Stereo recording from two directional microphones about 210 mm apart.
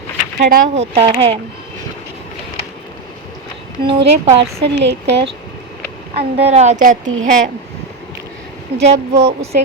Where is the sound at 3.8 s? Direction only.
25° right (ahead or behind).